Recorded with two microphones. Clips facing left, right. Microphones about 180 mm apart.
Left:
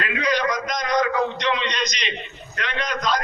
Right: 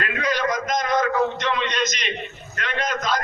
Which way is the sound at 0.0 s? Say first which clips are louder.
Left 1 dB; 50° right (ahead or behind).